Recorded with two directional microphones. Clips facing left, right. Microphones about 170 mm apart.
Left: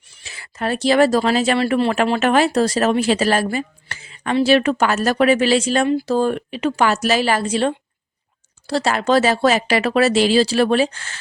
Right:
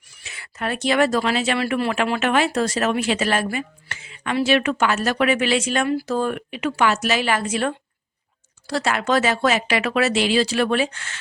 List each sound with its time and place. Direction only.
0.1 s speech: 30° left (ahead or behind)